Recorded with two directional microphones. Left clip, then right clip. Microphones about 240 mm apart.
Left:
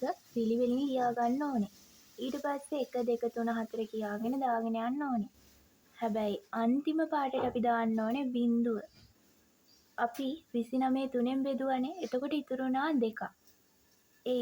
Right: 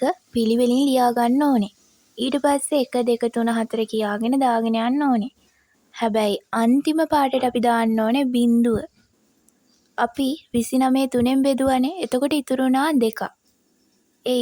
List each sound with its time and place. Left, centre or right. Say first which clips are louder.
0.0 s a woman's voice: right 13 dB; right
9.9 s a woman's voice: right 12 dB; right